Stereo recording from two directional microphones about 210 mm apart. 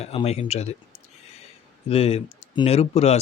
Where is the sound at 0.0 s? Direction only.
30° left (ahead or behind).